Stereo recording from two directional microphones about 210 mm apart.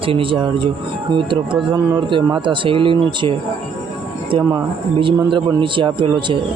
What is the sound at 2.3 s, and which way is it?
A man's voice, 25° right (ahead or behind).